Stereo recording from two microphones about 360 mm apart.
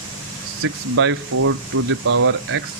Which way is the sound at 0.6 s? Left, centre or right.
Right.